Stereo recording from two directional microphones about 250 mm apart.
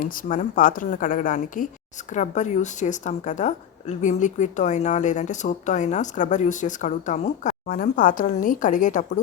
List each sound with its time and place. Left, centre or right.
0.0 s a woman's voice: left